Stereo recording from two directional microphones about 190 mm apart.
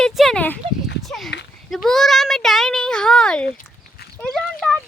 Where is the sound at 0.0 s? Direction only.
5° left (ahead or behind).